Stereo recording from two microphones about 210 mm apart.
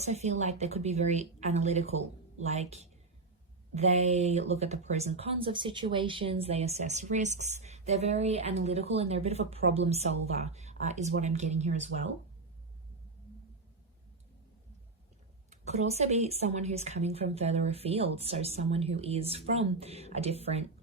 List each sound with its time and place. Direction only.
0.0 s speech: 30° right (ahead or behind)
15.4 s speech: 30° right (ahead or behind)